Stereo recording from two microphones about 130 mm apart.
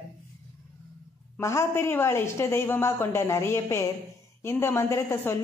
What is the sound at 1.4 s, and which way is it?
A woman's voice, 20° left (ahead or behind).